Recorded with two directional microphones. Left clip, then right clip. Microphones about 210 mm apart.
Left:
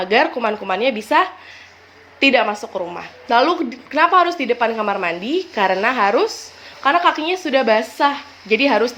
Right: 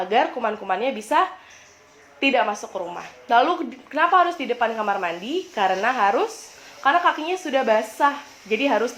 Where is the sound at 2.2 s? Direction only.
30° left (ahead or behind).